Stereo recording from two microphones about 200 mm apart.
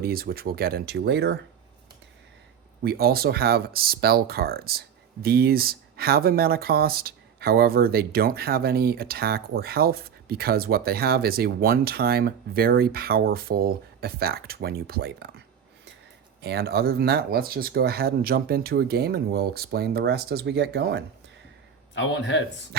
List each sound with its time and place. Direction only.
0.0 s speech: 50° right (ahead or behind)
2.8 s speech: 50° right (ahead or behind)
16.4 s speech: 55° right (ahead or behind)
21.9 s a man's voice: 65° left (ahead or behind)